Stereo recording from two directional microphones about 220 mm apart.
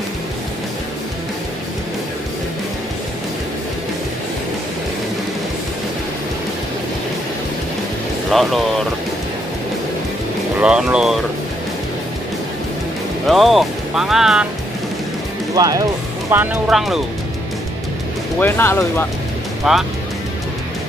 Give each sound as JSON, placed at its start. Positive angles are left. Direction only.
{"t": 8.3, "sound": "speech", "side_deg": 0}
{"t": 10.6, "sound": "speech", "side_deg": -5}
{"t": 13.3, "sound": "speech", "side_deg": 0}
{"t": 15.5, "sound": "speech", "side_deg": -15}
{"t": 18.4, "sound": "speech", "side_deg": 10}
{"t": 19.7, "sound": "speech", "side_deg": 0}